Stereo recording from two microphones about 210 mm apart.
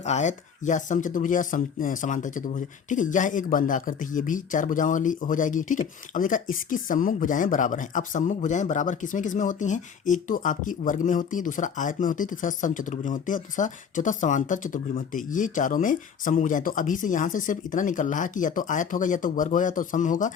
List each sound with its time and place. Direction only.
0.0 s speech: 35° left (ahead or behind)